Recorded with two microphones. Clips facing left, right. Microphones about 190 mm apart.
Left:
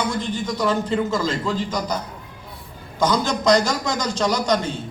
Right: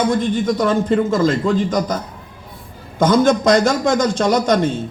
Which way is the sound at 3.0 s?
55° right (ahead or behind).